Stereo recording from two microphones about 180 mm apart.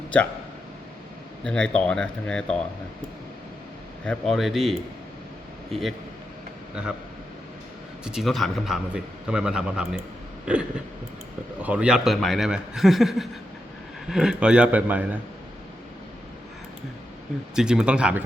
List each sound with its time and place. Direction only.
1.5 s a man's voice: 5° left (ahead or behind)
4.0 s a man's voice: 5° left (ahead or behind)
8.0 s a man's voice: centre (ahead or behind)
10.4 s throat clearing: 5° right (ahead or behind)
11.6 s a man's voice: 5° right (ahead or behind)
17.5 s a man's voice: 5° right (ahead or behind)